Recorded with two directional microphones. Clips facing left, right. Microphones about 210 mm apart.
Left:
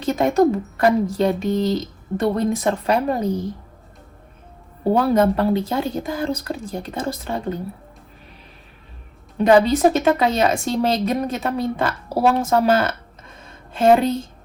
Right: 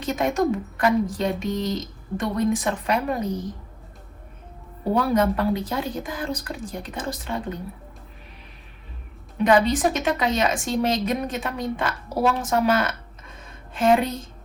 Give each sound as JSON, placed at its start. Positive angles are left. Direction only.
{"t": 0.0, "sound": "speech", "side_deg": 30}
{"t": 4.9, "sound": "speech", "side_deg": 30}
{"t": 9.4, "sound": "speech", "side_deg": 30}